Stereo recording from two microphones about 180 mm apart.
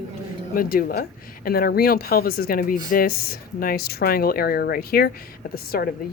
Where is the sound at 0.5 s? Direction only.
55° left (ahead or behind).